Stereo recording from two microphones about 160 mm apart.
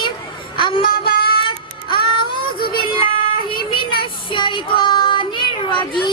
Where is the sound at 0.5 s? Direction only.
30° left (ahead or behind).